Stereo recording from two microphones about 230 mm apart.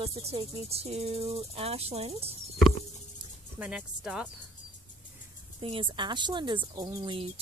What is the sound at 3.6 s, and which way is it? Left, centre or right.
Speech, centre.